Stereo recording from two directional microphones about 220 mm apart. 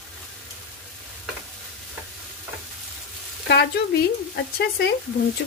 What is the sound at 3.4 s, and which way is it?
Speech, 50° left (ahead or behind).